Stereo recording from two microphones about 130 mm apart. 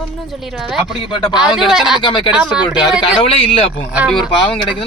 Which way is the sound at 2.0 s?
40° left (ahead or behind).